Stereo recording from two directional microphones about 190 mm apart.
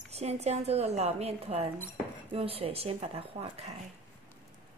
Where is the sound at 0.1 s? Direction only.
35° right (ahead or behind).